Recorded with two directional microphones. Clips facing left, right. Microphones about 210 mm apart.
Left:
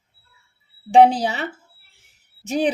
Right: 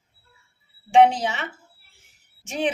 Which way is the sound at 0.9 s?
35° left (ahead or behind).